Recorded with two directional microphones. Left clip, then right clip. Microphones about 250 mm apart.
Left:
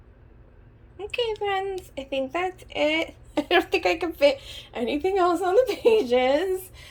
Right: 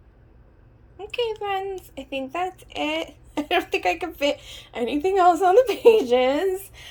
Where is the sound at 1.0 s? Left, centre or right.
Centre.